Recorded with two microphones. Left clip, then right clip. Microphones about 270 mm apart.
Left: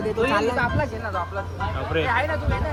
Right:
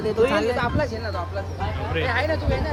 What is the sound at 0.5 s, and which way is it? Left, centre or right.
Speech, left.